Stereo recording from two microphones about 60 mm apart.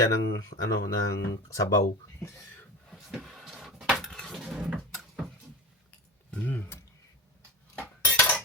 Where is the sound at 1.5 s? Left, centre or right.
Left.